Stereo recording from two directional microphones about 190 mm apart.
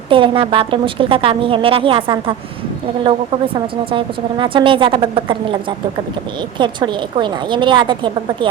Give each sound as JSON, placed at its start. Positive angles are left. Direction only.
{"t": 0.1, "sound": "a woman's voice", "side_deg": -25}